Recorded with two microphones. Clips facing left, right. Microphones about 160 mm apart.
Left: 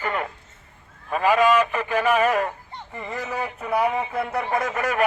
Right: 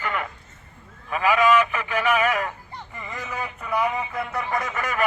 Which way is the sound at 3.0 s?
35° left (ahead or behind).